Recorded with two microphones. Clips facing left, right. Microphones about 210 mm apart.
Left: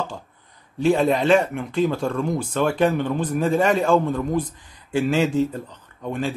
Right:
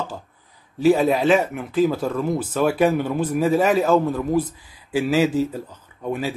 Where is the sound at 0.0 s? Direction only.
5° right (ahead or behind).